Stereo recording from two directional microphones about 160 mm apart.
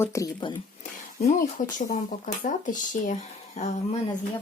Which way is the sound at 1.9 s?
55° left (ahead or behind).